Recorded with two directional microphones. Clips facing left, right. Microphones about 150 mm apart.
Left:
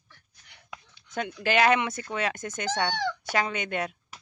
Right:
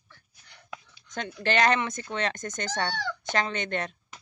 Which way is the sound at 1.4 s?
5° left (ahead or behind).